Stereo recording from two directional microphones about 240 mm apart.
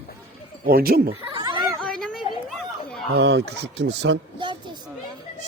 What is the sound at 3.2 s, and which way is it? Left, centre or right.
Speech, right.